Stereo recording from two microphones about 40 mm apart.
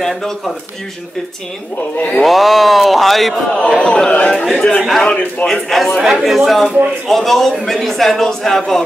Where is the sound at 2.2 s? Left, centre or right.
Centre.